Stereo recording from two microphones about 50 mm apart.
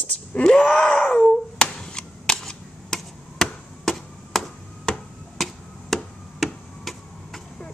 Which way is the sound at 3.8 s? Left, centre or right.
Centre.